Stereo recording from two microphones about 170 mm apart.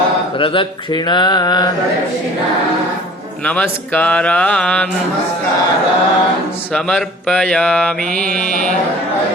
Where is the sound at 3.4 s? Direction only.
5° left (ahead or behind).